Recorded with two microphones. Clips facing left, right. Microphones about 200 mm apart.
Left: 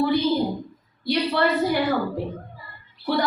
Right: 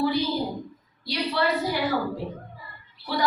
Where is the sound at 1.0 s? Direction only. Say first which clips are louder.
Left 4 dB; 55° left (ahead or behind).